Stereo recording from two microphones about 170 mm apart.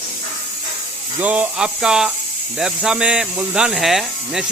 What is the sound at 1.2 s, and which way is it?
Speech, 10° right (ahead or behind).